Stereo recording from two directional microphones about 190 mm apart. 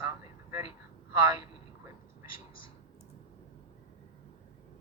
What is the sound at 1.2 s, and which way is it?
Speech, 15° right (ahead or behind).